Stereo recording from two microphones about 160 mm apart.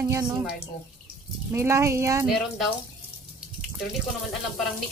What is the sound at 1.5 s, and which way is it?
Speech, 15° right (ahead or behind).